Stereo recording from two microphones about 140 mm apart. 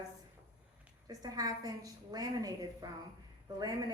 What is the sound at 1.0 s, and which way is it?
Speech, 25° right (ahead or behind).